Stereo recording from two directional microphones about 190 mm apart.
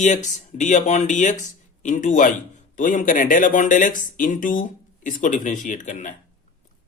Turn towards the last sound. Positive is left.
turn(degrees=40)  # may be behind; listen again after turning